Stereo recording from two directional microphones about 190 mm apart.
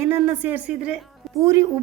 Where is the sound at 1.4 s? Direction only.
15° right (ahead or behind).